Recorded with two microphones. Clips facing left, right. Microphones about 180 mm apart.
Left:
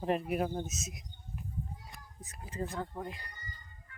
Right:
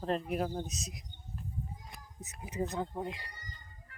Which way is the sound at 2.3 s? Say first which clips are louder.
Right 3 dB; 20° right (ahead or behind).